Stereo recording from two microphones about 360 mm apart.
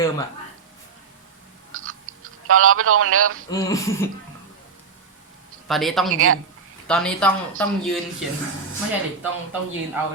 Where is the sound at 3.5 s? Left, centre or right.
Centre.